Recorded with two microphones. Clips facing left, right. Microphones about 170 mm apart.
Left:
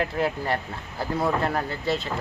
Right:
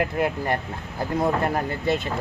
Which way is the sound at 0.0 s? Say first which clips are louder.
Right 2 dB; 15° right (ahead or behind).